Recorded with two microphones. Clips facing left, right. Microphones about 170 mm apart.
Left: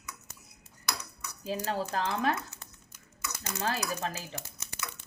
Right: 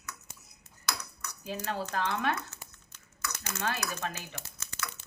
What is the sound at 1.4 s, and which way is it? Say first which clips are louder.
Speech: left 3 dB; 30° left (ahead or behind).